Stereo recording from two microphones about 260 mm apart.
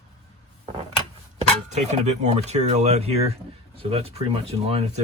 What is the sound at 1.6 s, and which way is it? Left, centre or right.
Speech, right.